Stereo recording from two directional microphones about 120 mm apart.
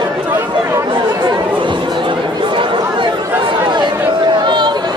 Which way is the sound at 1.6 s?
40° right (ahead or behind).